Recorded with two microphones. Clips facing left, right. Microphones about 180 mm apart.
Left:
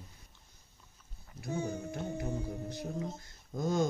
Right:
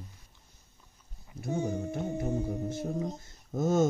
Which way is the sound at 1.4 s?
20° right (ahead or behind).